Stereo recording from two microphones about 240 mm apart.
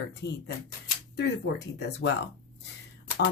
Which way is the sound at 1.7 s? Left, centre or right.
Left.